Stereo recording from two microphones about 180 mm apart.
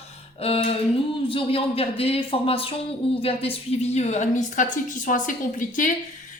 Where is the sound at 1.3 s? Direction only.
30° left (ahead or behind).